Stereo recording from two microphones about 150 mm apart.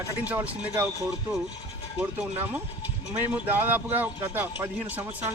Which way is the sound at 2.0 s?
15° right (ahead or behind).